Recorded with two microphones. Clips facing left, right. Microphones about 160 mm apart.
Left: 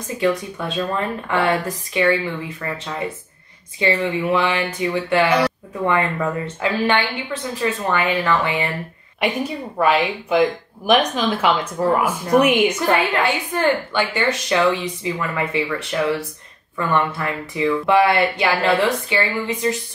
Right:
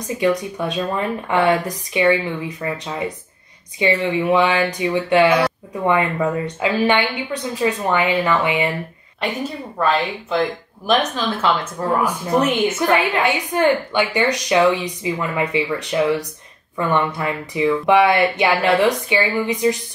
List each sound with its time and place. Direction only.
0.2 s a woman's voice: 15° right (ahead or behind)
9.2 s a woman's voice: 10° left (ahead or behind)
12.9 s a woman's voice: 15° right (ahead or behind)